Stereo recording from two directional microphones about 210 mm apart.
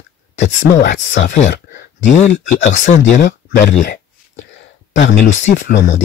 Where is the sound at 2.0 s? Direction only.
35° left (ahead or behind).